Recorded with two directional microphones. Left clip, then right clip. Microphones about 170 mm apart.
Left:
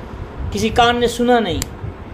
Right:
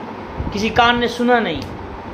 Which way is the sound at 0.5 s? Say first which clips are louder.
Even; 60° left (ahead or behind).